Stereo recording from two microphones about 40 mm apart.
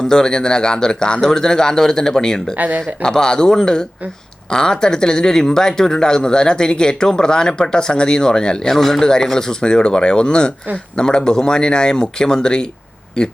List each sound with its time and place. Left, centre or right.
0.0 s a man's voice: centre
2.6 s speech: right
2.8 s a man's voice: centre
8.7 s a man's voice: centre